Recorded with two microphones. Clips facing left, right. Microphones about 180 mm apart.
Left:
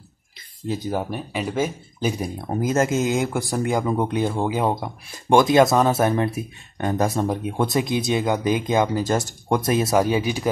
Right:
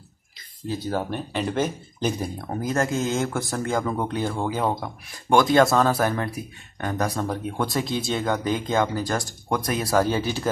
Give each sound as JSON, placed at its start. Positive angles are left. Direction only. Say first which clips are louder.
{"t": 0.7, "sound": "speech", "louder": "left 1 dB", "side_deg": 10}